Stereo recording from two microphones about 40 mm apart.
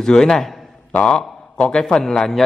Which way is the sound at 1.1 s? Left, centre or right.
Left.